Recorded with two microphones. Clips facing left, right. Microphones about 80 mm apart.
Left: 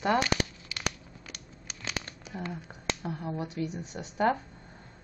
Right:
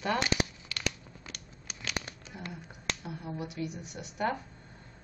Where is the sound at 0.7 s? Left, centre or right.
Centre.